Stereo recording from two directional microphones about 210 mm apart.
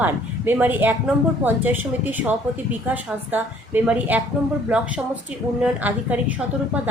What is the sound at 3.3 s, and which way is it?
A woman's voice, 5° right (ahead or behind).